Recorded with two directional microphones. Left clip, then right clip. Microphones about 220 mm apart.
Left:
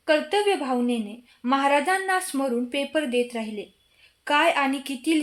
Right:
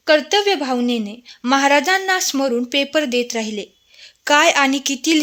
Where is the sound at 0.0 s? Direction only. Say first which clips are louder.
Right 7 dB; 45° right (ahead or behind).